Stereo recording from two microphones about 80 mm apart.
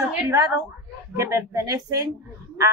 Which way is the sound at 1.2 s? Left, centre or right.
Right.